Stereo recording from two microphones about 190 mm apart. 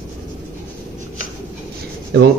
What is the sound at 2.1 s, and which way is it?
Speech, 60° right (ahead or behind).